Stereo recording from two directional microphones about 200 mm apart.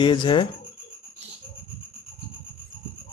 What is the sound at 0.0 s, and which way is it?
Speech, 25° left (ahead or behind).